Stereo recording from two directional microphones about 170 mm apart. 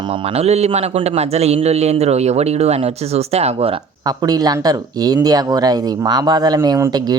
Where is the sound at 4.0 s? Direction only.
25° right (ahead or behind).